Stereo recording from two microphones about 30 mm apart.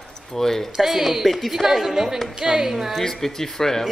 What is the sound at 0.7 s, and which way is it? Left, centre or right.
A woman's voice, centre.